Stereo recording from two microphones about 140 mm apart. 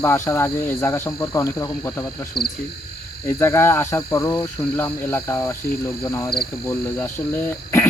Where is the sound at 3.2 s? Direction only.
15° left (ahead or behind).